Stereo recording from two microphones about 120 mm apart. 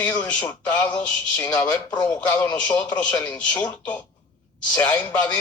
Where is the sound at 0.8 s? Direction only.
35° left (ahead or behind).